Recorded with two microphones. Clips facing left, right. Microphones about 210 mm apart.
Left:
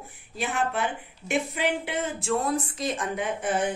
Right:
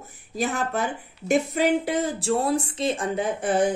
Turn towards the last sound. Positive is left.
turn(degrees=-35)  # may be behind; listen again after turning